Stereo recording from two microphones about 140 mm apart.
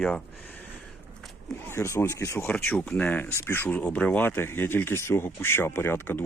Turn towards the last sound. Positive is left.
turn(degrees=15)  # may be behind; listen again after turning